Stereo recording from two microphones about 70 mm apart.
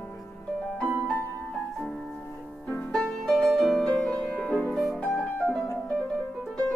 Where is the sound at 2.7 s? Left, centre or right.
Centre.